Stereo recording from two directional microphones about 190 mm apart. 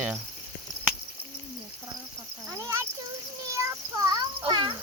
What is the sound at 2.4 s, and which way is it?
Cricket, 15° right (ahead or behind).